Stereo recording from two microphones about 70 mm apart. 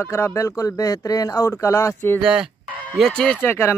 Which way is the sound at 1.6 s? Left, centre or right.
Left.